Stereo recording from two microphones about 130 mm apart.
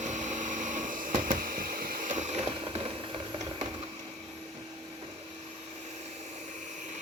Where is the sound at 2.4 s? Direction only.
45° right (ahead or behind).